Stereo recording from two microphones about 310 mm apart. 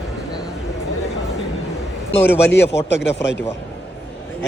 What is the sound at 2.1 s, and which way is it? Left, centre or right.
Speech, left.